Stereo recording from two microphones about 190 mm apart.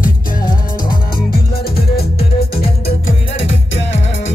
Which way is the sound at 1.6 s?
55° left (ahead or behind).